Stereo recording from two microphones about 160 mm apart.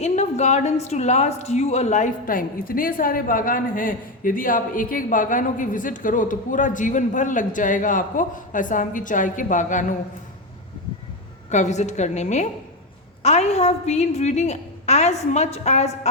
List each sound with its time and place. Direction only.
0.0 s speech: 45° left (ahead or behind)
11.5 s a woman's voice: 45° left (ahead or behind)